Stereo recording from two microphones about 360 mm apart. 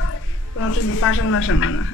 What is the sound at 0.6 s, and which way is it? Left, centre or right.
A woman's voice, left.